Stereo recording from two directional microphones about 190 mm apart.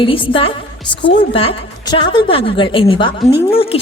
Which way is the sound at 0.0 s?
25° left (ahead or behind).